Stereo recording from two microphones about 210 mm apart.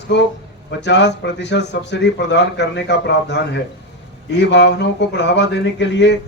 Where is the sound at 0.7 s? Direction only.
55° left (ahead or behind).